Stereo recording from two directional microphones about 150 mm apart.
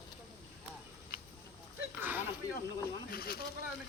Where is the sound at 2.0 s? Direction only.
15° right (ahead or behind).